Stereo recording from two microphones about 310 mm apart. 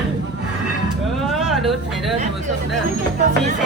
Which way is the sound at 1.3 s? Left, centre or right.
Centre.